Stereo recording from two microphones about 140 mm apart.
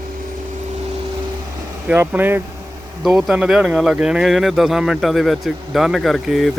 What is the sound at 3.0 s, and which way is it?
Speech, centre (ahead or behind).